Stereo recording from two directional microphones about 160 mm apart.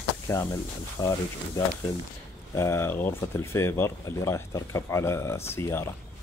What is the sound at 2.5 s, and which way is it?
Speech, 15° left (ahead or behind).